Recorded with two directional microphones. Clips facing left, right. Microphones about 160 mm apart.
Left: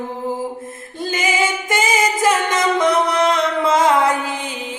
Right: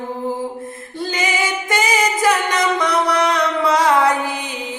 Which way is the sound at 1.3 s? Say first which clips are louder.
Left 1 dB; 25° left (ahead or behind).